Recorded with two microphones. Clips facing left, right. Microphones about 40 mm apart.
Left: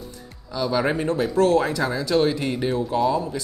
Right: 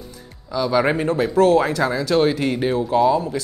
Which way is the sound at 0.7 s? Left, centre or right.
Right.